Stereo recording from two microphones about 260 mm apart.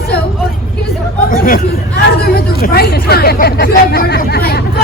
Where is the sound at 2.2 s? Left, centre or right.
Left.